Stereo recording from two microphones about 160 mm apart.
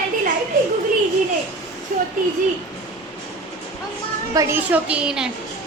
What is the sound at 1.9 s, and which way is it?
Speech, 55° right (ahead or behind).